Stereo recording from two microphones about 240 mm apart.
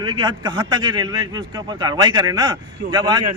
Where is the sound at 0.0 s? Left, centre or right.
Centre.